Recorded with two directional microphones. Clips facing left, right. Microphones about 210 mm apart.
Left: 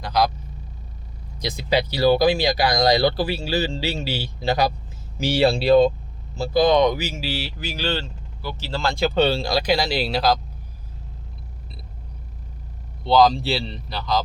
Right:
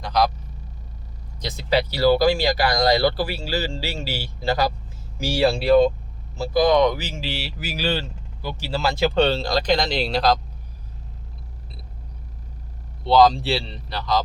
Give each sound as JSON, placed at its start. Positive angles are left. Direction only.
{"t": 0.0, "sound": "vehicle", "side_deg": 0}
{"t": 1.4, "sound": "speech", "side_deg": 15}
{"t": 13.1, "sound": "speech", "side_deg": 0}